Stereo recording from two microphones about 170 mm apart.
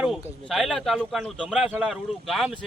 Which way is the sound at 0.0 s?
Centre (ahead or behind).